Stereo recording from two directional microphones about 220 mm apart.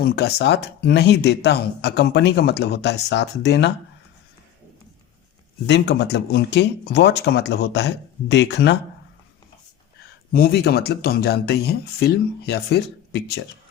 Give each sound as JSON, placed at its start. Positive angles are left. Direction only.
{"t": 0.0, "sound": "speech", "side_deg": 45}
{"t": 5.6, "sound": "speech", "side_deg": 50}
{"t": 10.3, "sound": "speech", "side_deg": 45}